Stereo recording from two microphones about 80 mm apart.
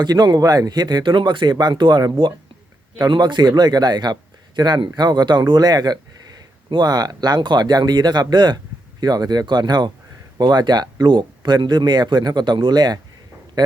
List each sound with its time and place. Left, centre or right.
0.0 s speech: right